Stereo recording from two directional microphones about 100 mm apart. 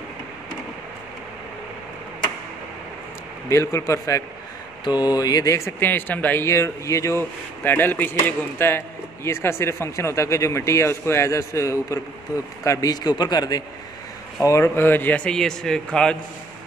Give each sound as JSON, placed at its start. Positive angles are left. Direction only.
{"t": 3.4, "sound": "a man's voice", "side_deg": 30}
{"t": 4.8, "sound": "speech", "side_deg": 45}
{"t": 6.4, "sound": "a man's voice", "side_deg": 30}
{"t": 14.4, "sound": "speech", "side_deg": 30}